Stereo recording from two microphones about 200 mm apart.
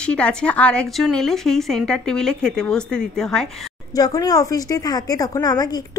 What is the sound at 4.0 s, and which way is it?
A woman's voice, 20° left (ahead or behind).